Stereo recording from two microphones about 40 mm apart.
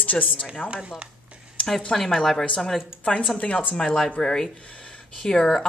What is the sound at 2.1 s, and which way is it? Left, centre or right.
Speech, centre.